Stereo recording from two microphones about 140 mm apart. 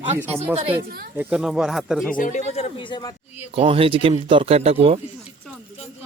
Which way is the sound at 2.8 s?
30° left (ahead or behind).